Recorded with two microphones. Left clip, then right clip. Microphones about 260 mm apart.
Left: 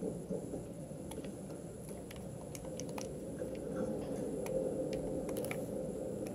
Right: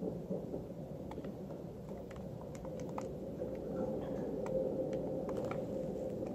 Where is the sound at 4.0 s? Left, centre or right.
Left.